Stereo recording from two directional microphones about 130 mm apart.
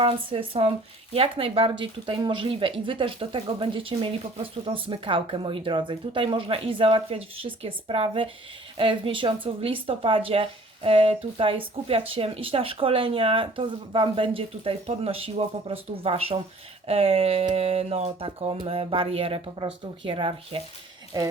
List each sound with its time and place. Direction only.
0.0 s speech: 45° right (ahead or behind)